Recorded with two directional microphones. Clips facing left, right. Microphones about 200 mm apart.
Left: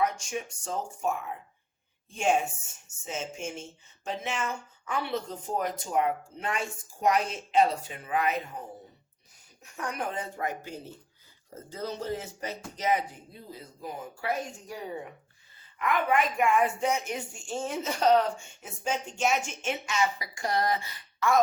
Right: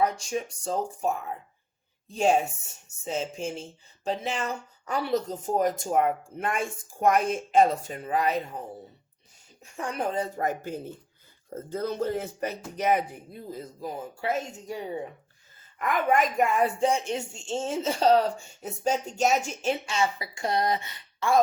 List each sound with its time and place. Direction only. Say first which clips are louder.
0.0 s a woman's voice: right 3 dB; 35° right (ahead or behind)
9.7 s a woman's voice: right 5 dB; 30° right (ahead or behind); by 13.7 s 50° right (ahead or behind)
13.8 s speech: right 2 dB; 25° right (ahead or behind)
15.8 s a woman's voice: right 2 dB; 45° right (ahead or behind)